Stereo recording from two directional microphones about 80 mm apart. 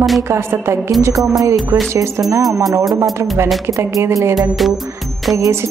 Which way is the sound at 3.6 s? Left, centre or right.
Right.